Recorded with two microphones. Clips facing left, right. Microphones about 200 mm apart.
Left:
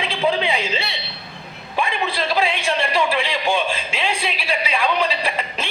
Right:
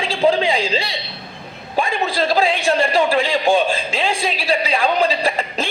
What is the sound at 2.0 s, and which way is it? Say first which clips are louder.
A woman's voice: right 4 dB; 40° right (ahead or behind).